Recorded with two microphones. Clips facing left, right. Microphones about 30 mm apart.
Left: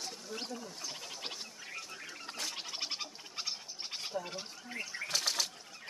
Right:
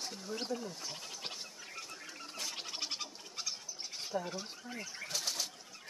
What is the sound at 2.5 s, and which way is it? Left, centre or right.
Gargling, centre.